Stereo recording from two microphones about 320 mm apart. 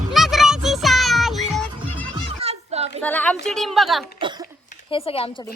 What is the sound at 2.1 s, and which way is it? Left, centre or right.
Music, centre.